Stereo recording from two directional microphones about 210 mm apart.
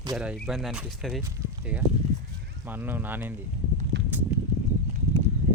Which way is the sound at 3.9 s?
55° right (ahead or behind).